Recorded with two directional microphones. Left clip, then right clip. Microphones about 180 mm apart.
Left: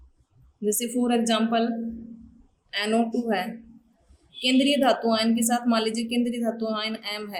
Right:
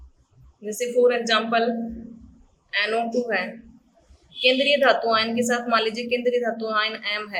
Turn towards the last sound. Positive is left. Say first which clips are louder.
# right 6 dB
turn(degrees=25)  # may be behind; listen again after turning